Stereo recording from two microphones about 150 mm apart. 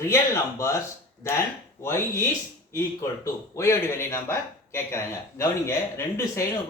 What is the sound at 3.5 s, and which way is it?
Speech, 20° left (ahead or behind).